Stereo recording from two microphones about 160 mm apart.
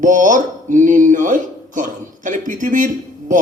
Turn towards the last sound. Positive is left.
turn(degrees=-55)  # may be behind; listen again after turning